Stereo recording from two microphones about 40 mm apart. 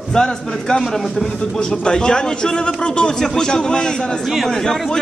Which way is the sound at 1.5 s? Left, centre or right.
Left.